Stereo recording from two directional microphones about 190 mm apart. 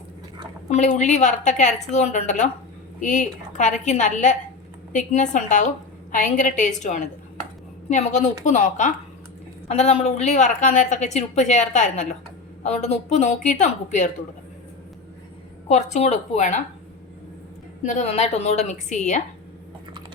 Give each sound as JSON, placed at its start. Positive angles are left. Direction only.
{"t": 0.7, "sound": "a woman's voice", "side_deg": 40}
{"t": 15.7, "sound": "a woman's voice", "side_deg": 40}
{"t": 17.8, "sound": "a woman's voice", "side_deg": 35}